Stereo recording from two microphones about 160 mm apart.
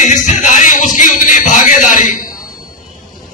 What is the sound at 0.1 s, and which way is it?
Music, 50° left (ahead or behind).